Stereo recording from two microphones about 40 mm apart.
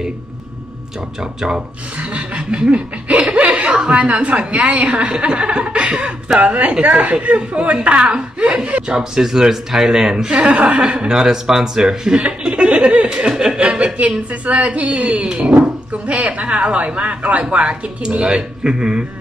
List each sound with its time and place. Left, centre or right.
2.0 s chuckle: right
3.7 s a woman's voice: right
9.2 s speech: centre
10.5 s a woman's voice: right
11.1 s speech: centre; by 13.3 s right
13.3 s chuckle: centre
14.4 s a woman's voice: right
18.2 s speech: centre